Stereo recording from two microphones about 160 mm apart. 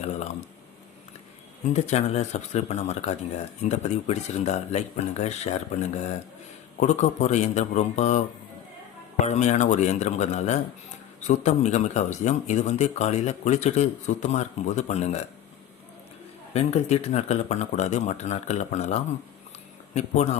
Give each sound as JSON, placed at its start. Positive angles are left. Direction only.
{"t": 1.7, "sound": "speech", "side_deg": 45}
{"t": 6.7, "sound": "speech", "side_deg": 50}
{"t": 9.2, "sound": "speech", "side_deg": 45}
{"t": 16.5, "sound": "speech", "side_deg": 40}